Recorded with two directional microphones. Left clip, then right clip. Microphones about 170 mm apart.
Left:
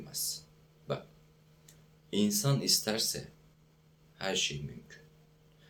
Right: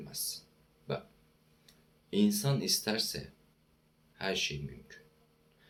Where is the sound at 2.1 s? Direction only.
5° left (ahead or behind).